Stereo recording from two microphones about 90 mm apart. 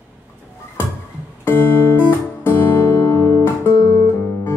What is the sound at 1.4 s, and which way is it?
Music, 25° left (ahead or behind).